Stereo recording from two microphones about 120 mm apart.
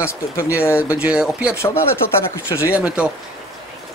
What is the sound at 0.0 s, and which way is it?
Speech, 25° left (ahead or behind).